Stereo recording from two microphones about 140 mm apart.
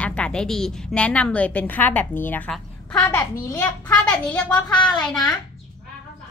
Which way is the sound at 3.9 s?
5° left (ahead or behind).